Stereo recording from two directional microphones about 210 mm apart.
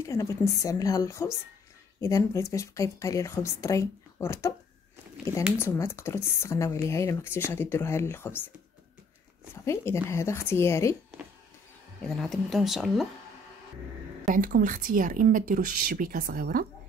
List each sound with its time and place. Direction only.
0.0 s speech: 15° left (ahead or behind)
5.6 s speech: 10° left (ahead or behind)
10.0 s speech: 10° left (ahead or behind)
12.1 s speech: centre (ahead or behind)
14.2 s a woman's voice: 40° right (ahead or behind)